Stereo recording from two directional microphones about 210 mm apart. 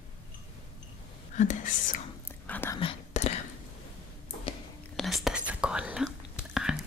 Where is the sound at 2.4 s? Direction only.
10° left (ahead or behind).